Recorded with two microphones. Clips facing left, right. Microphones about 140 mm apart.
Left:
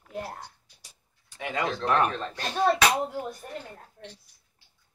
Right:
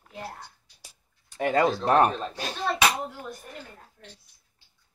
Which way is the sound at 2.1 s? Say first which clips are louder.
Right 1 dB; 10° right (ahead or behind).